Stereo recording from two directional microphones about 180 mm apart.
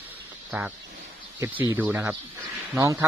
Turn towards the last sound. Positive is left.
turn(degrees=-15)  # may be behind; listen again after turning